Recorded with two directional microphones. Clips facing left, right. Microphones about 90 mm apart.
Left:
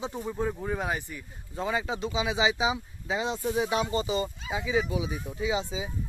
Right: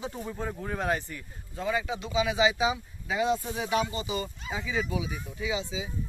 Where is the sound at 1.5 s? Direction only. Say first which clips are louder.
Even; 25° left (ahead or behind).